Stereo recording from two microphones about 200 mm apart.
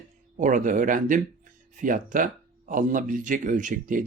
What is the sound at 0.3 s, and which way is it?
Speech, 40° right (ahead or behind).